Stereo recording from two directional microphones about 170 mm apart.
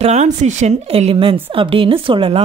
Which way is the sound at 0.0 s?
40° right (ahead or behind).